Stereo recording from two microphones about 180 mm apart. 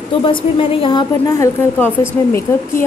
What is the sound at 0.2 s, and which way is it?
Speech, 30° left (ahead or behind).